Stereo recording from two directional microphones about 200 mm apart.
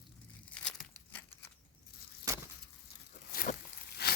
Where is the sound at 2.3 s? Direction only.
15° right (ahead or behind).